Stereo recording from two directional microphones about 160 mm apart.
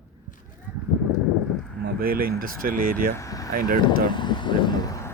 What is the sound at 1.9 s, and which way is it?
Speech, 65° right (ahead or behind).